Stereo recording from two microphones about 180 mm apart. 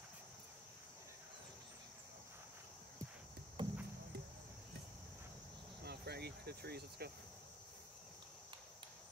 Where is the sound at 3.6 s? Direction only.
25° right (ahead or behind).